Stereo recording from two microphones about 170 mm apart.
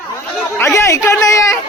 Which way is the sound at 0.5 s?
15° left (ahead or behind).